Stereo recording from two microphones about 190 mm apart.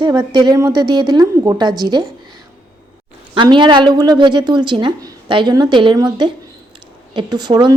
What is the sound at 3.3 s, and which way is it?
Speech, 25° right (ahead or behind).